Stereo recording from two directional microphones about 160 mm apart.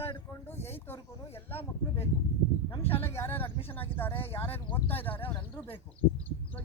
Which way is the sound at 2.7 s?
35° left (ahead or behind).